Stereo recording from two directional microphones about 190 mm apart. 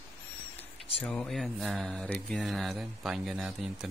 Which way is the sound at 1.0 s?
5° left (ahead or behind).